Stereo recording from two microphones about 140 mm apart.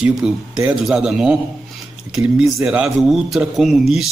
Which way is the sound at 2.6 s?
5° right (ahead or behind).